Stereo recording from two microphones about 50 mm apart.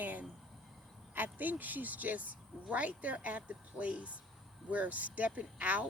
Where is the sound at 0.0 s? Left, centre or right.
Right.